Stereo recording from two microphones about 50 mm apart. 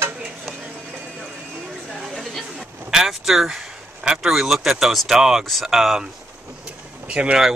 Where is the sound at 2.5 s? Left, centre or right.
Centre.